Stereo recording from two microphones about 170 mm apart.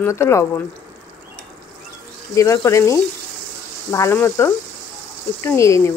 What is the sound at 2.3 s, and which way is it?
Speech, 20° left (ahead or behind).